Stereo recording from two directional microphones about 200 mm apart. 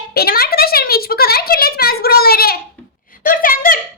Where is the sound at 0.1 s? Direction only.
50° left (ahead or behind).